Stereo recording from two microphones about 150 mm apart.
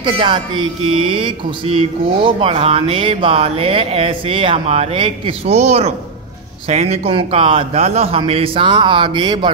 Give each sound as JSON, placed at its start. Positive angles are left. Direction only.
{"t": 0.0, "sound": "speech", "side_deg": -30}
{"t": 5.6, "sound": "speech", "side_deg": -45}